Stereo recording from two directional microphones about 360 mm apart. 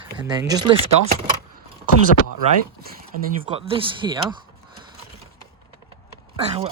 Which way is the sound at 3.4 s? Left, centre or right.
Centre.